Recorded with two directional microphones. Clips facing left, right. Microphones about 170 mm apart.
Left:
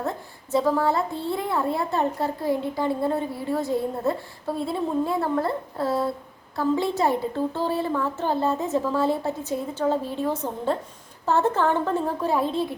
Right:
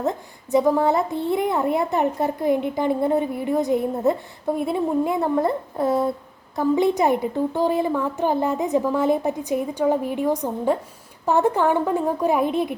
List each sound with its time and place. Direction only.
0.0 s a child's voice: 15° right (ahead or behind)